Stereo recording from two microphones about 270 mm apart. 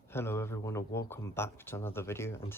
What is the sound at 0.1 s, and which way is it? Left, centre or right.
Speech, centre.